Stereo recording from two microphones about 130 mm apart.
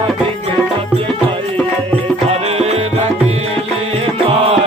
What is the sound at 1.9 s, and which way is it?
Music, 50° right (ahead or behind).